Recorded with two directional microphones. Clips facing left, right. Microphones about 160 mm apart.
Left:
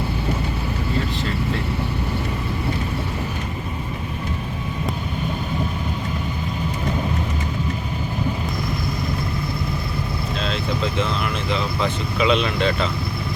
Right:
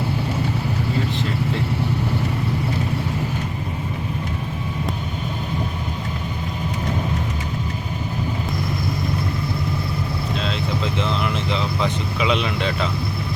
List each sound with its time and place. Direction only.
10.4 s vehicle: 20° right (ahead or behind)